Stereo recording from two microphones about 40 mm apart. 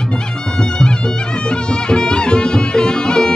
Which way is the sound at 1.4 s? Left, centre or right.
Left.